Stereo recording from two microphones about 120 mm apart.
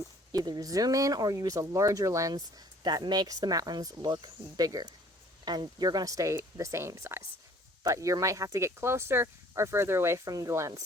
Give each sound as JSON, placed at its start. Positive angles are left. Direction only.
{"t": 0.3, "sound": "speech", "side_deg": -35}
{"t": 2.8, "sound": "speech", "side_deg": -40}